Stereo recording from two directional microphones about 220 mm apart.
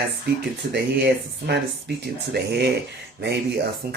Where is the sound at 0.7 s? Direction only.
50° right (ahead or behind).